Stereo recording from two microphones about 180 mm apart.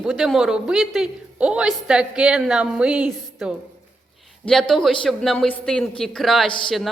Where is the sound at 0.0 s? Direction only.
Centre (ahead or behind).